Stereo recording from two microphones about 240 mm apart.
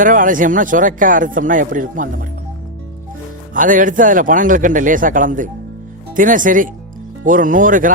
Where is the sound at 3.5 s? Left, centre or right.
Right.